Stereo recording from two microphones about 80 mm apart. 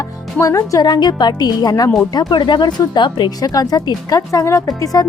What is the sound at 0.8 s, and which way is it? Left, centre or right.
Speech, left.